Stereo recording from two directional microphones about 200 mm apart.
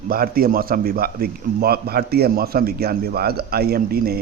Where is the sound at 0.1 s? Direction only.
45° right (ahead or behind).